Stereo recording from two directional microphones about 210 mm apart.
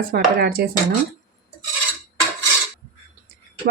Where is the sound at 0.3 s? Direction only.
50° right (ahead or behind).